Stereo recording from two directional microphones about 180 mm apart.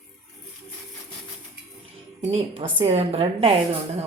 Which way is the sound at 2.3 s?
35° right (ahead or behind).